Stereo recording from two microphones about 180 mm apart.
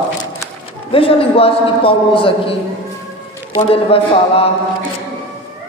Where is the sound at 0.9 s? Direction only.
30° left (ahead or behind).